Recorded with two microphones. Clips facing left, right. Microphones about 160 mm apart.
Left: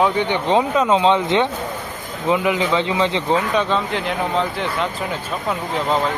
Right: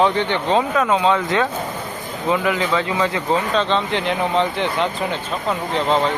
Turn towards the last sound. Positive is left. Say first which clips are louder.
# right 1 dB
turn(degrees=5)  # may be behind; listen again after turning